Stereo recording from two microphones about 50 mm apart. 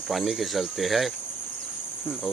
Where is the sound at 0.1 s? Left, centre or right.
Centre.